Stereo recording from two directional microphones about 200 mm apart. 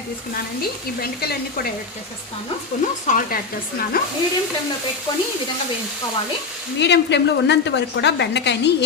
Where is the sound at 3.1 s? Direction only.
45° left (ahead or behind).